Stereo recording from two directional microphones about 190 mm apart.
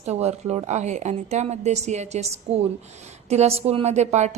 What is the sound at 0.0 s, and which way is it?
A woman's voice, 35° right (ahead or behind).